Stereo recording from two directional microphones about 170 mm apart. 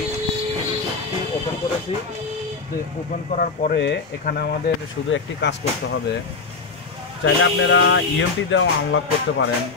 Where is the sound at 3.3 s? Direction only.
55° left (ahead or behind).